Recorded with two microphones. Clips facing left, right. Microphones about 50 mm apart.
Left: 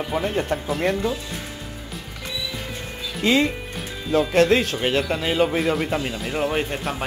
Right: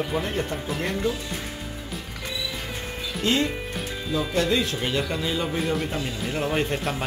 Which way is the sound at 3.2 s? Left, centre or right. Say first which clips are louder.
Left 4 dB; left.